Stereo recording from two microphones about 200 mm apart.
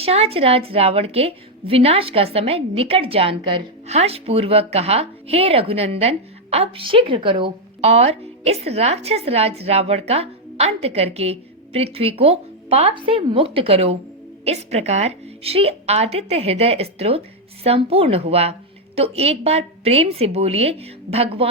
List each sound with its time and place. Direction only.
0.0 s a woman's voice: 30° right (ahead or behind)